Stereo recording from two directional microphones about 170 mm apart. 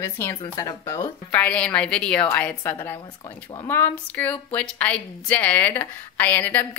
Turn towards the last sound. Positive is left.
turn(degrees=10)  # may be behind; listen again after turning